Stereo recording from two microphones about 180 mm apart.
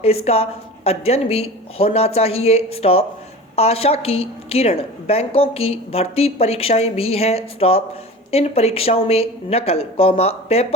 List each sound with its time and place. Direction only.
0.0 s a woman's voice: 35° left (ahead or behind)